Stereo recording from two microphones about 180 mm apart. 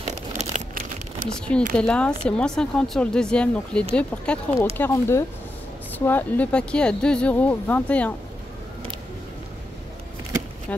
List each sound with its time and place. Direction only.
0.0 s crumpling: 40° right (ahead or behind)
1.5 s speech: 5° left (ahead or behind)